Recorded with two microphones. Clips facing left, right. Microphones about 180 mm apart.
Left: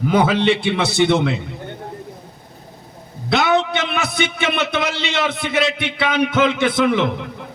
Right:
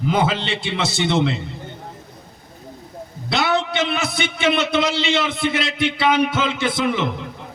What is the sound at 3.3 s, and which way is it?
A man's voice, 50° left (ahead or behind).